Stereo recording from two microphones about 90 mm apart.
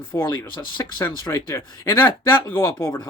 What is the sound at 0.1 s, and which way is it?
Speech, 35° left (ahead or behind).